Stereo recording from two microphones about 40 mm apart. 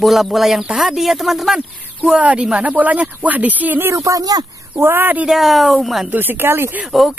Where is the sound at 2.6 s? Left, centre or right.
Right.